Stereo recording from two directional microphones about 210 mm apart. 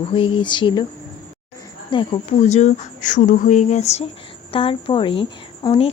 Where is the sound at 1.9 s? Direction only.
30° left (ahead or behind).